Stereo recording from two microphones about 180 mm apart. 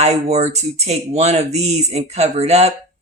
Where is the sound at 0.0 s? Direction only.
40° right (ahead or behind).